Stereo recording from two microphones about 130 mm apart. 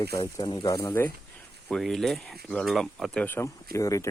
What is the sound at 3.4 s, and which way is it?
Speech, 25° left (ahead or behind).